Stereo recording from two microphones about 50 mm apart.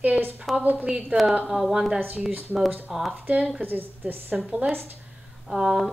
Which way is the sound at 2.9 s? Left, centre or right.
Centre.